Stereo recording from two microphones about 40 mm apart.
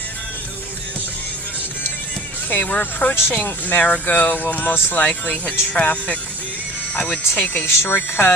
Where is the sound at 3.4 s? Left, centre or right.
Left.